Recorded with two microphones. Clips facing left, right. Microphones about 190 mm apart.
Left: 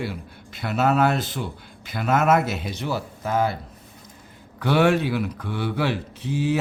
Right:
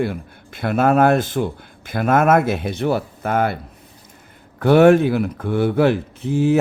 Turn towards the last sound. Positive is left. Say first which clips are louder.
# right 7 dB
turn(degrees=-50)  # may be behind; listen again after turning